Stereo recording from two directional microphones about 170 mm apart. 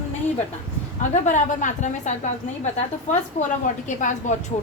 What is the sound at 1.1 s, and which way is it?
A woman's voice, 45° left (ahead or behind).